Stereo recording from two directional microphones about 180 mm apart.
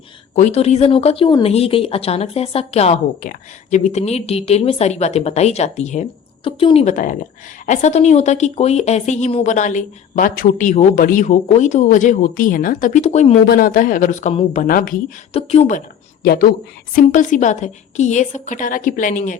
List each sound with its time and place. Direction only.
0.3 s speech: 40° left (ahead or behind)
3.2 s speech: 45° left (ahead or behind)
6.9 s a woman's voice: 45° left (ahead or behind)
13.5 s a woman's voice: 50° left (ahead or behind)
15.3 s speech: 35° left (ahead or behind)
16.2 s a woman's voice: 60° left (ahead or behind)
16.9 s a woman's voice: 50° left (ahead or behind)